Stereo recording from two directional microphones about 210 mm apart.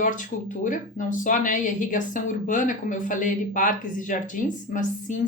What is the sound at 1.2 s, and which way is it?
A woman's voice, 40° left (ahead or behind).